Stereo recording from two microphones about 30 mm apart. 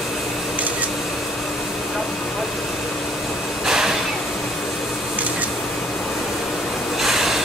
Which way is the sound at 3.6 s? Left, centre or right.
Centre.